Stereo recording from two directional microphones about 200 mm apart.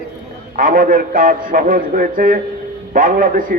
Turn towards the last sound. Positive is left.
turn(degrees=-45)  # may be behind; listen again after turning